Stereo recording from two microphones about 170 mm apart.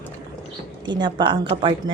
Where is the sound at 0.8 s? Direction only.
25° right (ahead or behind).